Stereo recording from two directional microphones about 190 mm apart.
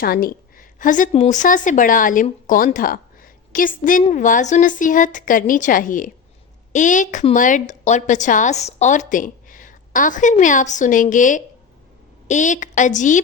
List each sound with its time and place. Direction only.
0.0 s a woman's voice: 50° left (ahead or behind)